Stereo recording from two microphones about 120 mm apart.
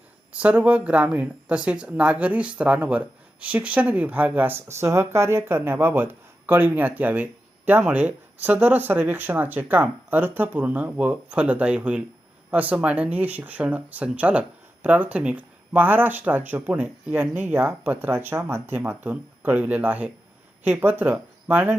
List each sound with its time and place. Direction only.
0.3 s speech: 10° right (ahead or behind)